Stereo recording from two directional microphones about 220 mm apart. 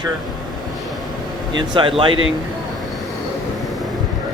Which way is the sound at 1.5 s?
20° right (ahead or behind).